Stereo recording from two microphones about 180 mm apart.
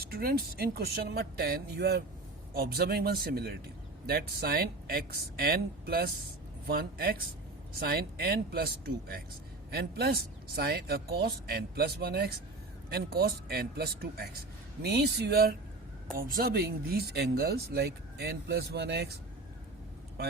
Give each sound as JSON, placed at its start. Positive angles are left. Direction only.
{"t": 0.0, "sound": "speech", "side_deg": -55}